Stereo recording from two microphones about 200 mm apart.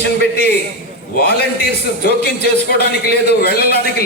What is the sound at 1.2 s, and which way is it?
A man's voice, 55° left (ahead or behind).